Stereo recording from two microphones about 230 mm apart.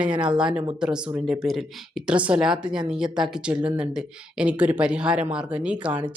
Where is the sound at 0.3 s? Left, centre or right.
Centre.